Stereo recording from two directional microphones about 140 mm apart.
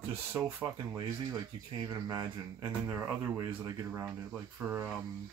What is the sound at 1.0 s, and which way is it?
Speech, 30° right (ahead or behind).